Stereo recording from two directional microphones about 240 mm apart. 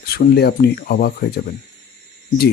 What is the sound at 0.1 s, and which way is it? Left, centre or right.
Speech, left.